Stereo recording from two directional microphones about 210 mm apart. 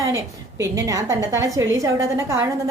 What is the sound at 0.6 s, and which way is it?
A woman's voice, 15° right (ahead or behind).